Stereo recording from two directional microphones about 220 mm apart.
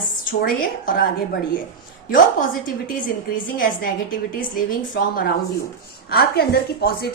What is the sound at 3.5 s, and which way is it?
Speech, 40° left (ahead or behind).